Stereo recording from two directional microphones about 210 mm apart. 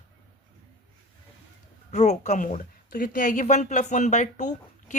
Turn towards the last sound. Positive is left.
turn(degrees=35)  # may be behind; listen again after turning